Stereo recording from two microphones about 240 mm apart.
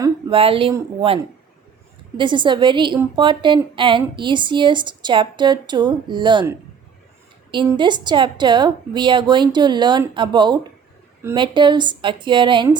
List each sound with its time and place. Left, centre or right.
0.0 s a woman's voice: right
7.5 s a woman's voice: centre